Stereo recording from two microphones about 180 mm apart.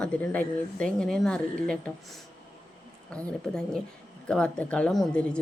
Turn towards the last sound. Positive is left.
turn(degrees=5)  # may be behind; listen again after turning